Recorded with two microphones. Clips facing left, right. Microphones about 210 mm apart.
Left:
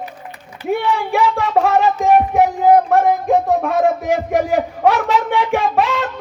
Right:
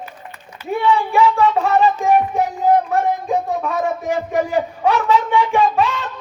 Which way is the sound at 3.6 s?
75° left (ahead or behind).